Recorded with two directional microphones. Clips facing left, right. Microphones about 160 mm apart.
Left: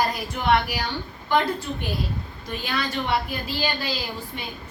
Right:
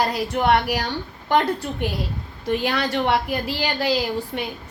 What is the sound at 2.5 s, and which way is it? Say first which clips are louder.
A woman's voice: right 7 dB; 75° right (ahead or behind).